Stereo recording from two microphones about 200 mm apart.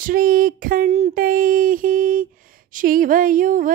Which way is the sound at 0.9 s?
30° right (ahead or behind).